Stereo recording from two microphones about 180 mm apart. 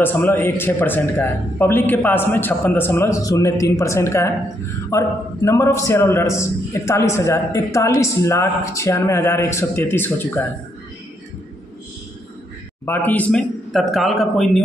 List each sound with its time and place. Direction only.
0.0 s a man's voice: 10° left (ahead or behind)
12.8 s speech: 10° left (ahead or behind)